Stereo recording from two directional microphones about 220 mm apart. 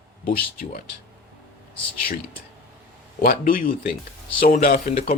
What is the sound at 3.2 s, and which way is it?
Speech, 40° left (ahead or behind).